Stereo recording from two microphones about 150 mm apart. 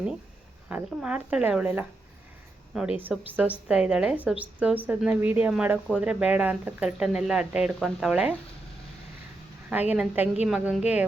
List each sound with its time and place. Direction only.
0.7 s speech: 10° right (ahead or behind)
9.6 s speech: 10° right (ahead or behind)